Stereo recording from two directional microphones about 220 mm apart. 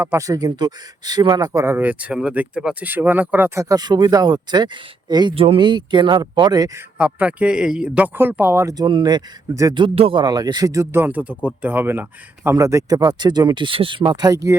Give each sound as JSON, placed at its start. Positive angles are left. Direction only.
{"t": 0.0, "sound": "speech", "side_deg": -10}
{"t": 7.0, "sound": "speech", "side_deg": -5}